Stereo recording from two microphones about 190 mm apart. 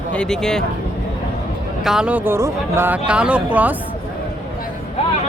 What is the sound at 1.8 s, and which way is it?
Speech, 5° right (ahead or behind).